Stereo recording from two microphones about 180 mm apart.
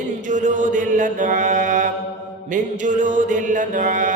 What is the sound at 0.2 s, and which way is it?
Mantra, 45° right (ahead or behind).